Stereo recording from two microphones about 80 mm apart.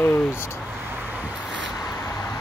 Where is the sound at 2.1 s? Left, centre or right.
Left.